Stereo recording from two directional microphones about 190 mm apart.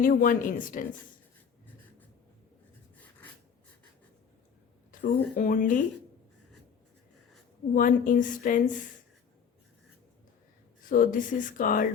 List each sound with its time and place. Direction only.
0.0 s speech: 50° left (ahead or behind)
4.9 s speech: 45° left (ahead or behind)
7.8 s speech: 45° left (ahead or behind)
10.8 s speech: 45° left (ahead or behind)